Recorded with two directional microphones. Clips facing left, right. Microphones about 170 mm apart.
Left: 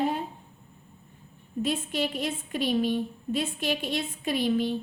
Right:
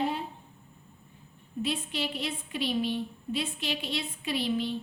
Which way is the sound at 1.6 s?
45° left (ahead or behind).